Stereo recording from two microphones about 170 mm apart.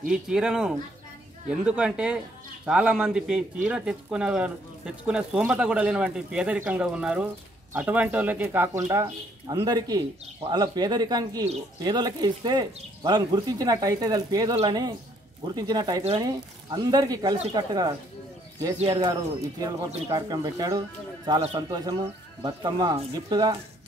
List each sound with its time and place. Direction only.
0.1 s speech: 5° right (ahead or behind); by 23.5 s 25° right (ahead or behind)